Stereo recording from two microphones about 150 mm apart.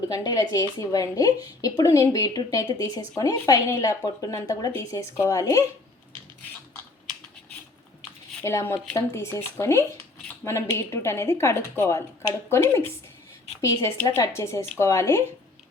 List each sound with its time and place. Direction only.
0.1 s a woman's voice: 25° left (ahead or behind)
8.4 s a woman's voice: 15° left (ahead or behind)